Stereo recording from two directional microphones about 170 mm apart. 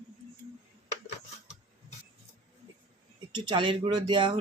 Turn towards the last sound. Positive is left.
turn(degrees=-30)  # may be behind; listen again after turning